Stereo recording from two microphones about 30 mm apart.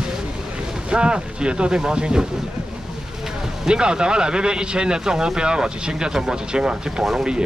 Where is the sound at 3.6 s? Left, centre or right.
Right.